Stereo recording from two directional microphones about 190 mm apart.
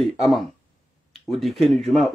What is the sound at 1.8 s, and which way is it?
Speech, 30° right (ahead or behind).